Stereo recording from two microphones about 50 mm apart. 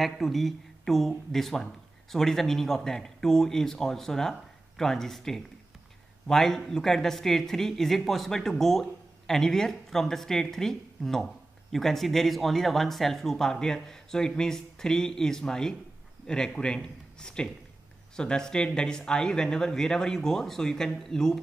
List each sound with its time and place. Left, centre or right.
0.0 s speech: centre